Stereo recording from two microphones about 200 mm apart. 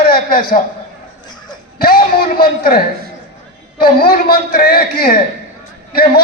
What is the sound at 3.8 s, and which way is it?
A man's voice, 50° left (ahead or behind).